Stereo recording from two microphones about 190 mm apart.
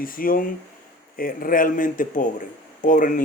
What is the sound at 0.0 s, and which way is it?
Speech, 50° left (ahead or behind).